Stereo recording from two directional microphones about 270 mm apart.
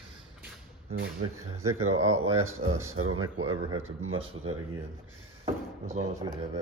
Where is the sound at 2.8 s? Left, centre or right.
Right.